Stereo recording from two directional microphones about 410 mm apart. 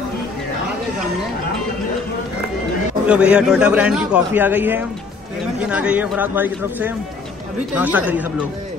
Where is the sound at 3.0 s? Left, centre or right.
Centre.